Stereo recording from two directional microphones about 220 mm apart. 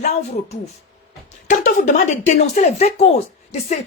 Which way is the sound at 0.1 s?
30° left (ahead or behind).